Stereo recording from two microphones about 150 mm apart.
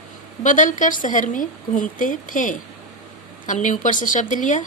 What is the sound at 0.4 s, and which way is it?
A woman's voice, 60° left (ahead or behind).